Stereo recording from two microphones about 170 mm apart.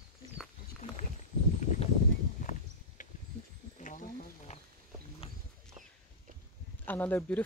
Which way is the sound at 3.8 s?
50° left (ahead or behind).